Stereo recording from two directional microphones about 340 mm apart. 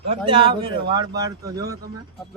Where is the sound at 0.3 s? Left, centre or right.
Centre.